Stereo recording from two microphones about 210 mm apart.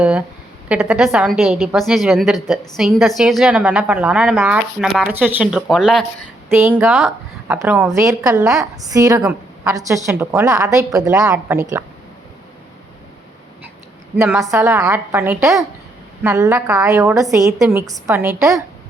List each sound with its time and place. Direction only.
0.0 s speech: 5° right (ahead or behind)
6.5 s a woman's voice: 10° right (ahead or behind)
14.2 s a woman's voice: 10° right (ahead or behind)